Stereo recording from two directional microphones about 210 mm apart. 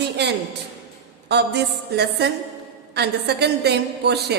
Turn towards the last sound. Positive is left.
turn(degrees=-50)  # may be behind; listen again after turning